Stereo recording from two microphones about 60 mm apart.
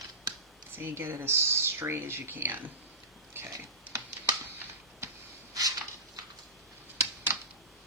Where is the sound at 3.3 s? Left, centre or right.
Right.